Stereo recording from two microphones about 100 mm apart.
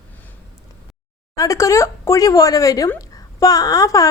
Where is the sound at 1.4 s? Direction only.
30° left (ahead or behind).